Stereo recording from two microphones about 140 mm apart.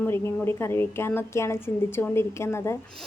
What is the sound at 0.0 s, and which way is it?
A woman's voice, 20° left (ahead or behind).